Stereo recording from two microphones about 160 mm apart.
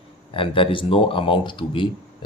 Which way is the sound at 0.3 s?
35° left (ahead or behind).